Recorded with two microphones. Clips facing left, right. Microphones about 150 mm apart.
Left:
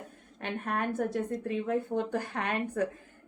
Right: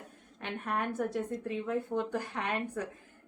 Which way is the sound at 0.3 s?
50° left (ahead or behind).